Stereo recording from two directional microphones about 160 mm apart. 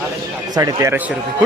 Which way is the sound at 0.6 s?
20° right (ahead or behind).